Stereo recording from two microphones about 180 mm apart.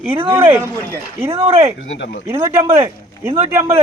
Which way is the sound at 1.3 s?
30° right (ahead or behind).